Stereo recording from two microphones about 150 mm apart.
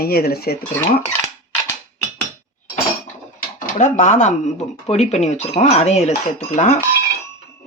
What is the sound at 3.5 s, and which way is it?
Speech, 60° left (ahead or behind).